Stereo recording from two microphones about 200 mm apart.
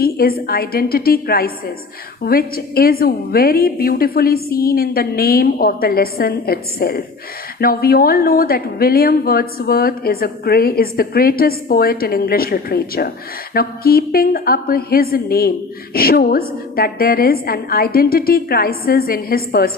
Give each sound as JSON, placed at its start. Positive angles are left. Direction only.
{"t": 0.0, "sound": "a woman's voice", "side_deg": 50}